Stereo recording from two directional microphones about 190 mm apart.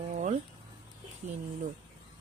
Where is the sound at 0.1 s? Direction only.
40° right (ahead or behind).